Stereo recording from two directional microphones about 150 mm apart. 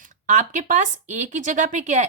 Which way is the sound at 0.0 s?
55° right (ahead or behind).